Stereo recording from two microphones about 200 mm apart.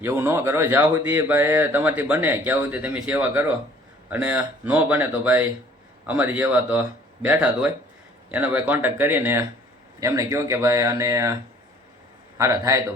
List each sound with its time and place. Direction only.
0.0 s speech: 10° right (ahead or behind)
12.4 s speech: 15° right (ahead or behind)